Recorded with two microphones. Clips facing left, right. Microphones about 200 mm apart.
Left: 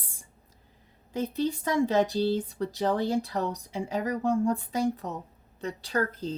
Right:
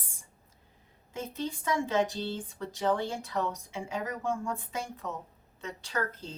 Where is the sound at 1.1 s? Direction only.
35° left (ahead or behind).